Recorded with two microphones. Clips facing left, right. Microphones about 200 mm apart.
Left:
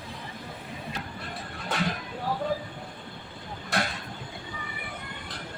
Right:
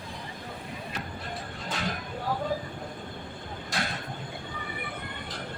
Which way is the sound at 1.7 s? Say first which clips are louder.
Left 5 dB; 60° left (ahead or behind).